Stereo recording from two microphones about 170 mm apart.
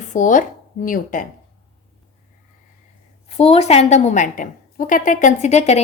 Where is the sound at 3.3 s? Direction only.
35° left (ahead or behind).